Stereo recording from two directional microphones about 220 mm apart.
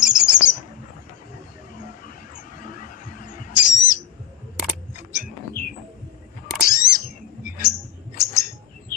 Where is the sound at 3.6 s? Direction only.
90° left.